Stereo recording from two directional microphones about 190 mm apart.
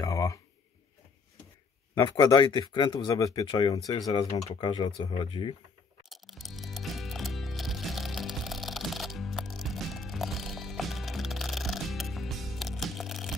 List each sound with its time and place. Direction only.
0.0 s a sound: 15° left (ahead or behind)
2.0 s speech: 20° left (ahead or behind)
6.0 s music: centre (ahead or behind)